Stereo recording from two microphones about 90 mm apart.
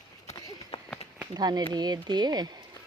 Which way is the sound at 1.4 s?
50° right (ahead or behind).